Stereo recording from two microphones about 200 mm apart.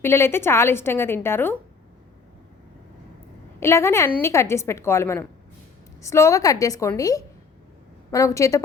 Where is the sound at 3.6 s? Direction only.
15° left (ahead or behind).